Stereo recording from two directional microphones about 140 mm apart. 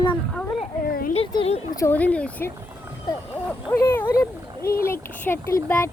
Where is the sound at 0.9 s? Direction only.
90° left.